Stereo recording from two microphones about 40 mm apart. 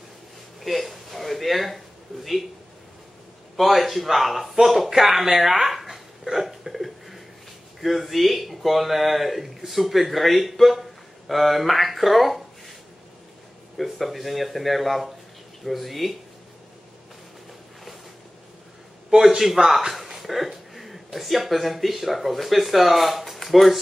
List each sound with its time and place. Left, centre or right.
0.6 s speech: centre
3.5 s speech: centre
6.3 s hiccup: centre
7.8 s speech: centre
13.7 s speech: centre
19.0 s speech: centre